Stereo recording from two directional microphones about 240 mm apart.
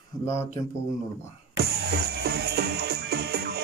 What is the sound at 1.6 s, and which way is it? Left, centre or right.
Music, right.